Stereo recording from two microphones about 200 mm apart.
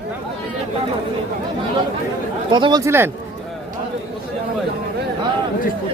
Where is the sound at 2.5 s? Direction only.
20° right (ahead or behind).